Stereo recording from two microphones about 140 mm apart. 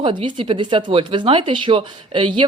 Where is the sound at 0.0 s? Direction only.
35° right (ahead or behind).